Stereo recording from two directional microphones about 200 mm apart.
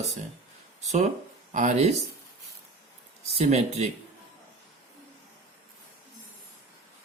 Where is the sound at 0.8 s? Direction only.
35° right (ahead or behind).